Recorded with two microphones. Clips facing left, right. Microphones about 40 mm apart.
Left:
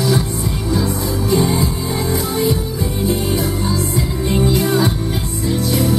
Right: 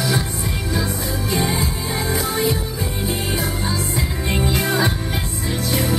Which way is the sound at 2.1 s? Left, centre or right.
Centre.